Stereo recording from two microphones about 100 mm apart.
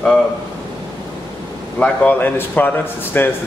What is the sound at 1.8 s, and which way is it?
A man's voice, 15° left (ahead or behind).